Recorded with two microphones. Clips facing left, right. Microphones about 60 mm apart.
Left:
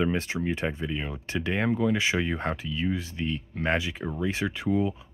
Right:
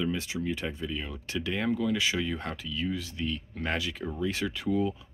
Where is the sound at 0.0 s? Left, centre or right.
Left.